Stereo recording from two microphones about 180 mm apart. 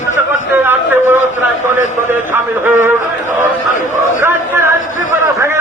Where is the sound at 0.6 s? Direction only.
10° right (ahead or behind).